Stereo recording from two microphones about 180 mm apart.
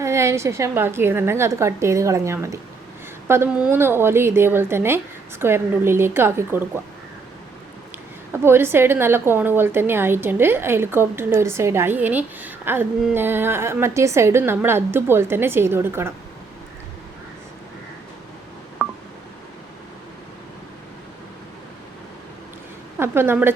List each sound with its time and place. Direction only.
0.0 s a woman's voice: 15° right (ahead or behind)
8.3 s a woman's voice: 15° right (ahead or behind)
18.8 s telephone dialing: 5° right (ahead or behind)
23.0 s a woman's voice: 15° right (ahead or behind)